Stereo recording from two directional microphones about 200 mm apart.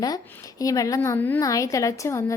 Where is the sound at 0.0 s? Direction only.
15° left (ahead or behind).